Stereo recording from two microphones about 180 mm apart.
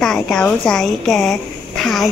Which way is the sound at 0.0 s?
5° left (ahead or behind).